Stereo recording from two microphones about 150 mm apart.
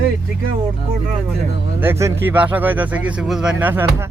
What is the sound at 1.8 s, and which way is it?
Speech, 15° right (ahead or behind).